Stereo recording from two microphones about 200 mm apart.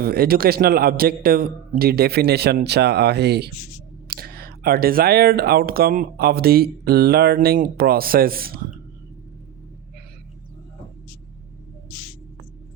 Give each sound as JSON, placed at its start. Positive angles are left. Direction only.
{"t": 0.0, "sound": "speech", "side_deg": -50}